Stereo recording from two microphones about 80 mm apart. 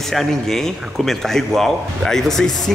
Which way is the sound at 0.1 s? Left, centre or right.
Centre.